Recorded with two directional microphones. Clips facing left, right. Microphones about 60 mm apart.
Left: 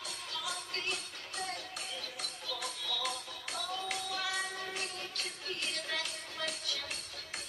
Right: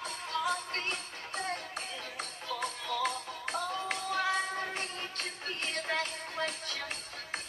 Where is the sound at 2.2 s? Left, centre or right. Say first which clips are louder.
Right 7 dB; right.